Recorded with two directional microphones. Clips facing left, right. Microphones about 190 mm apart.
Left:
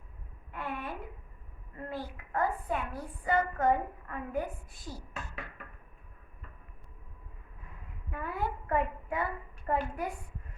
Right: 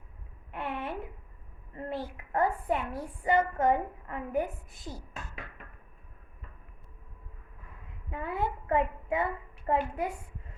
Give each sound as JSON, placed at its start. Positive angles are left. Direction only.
{"t": 0.5, "sound": "a sound", "side_deg": -25}
{"t": 1.7, "sound": "a woman's voice", "side_deg": -25}
{"t": 8.1, "sound": "a woman's voice", "side_deg": -25}